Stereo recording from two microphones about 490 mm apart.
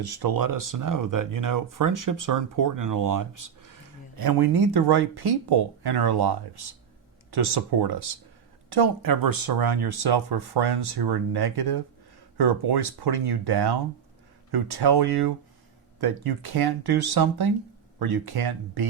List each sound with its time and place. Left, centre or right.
0.0 s speech: right